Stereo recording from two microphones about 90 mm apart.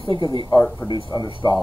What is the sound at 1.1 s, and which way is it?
Speech, 40° left (ahead or behind).